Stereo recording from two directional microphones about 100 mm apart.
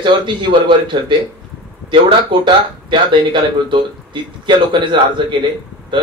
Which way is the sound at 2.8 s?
55° right (ahead or behind).